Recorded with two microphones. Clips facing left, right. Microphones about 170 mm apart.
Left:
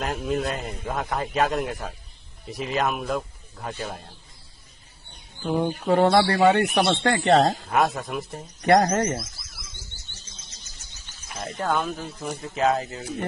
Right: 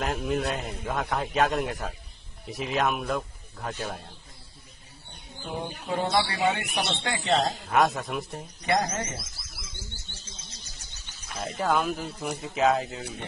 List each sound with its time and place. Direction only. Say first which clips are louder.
0.0 s a man's voice: left 2 dB; centre (ahead or behind)
5.6 s speech: left 10 dB; 65° left (ahead or behind)
7.7 s a man's voice: left 1 dB; centre (ahead or behind)
8.6 s speech: left 8 dB; 55° left (ahead or behind)
11.3 s a man's voice: even; centre (ahead or behind)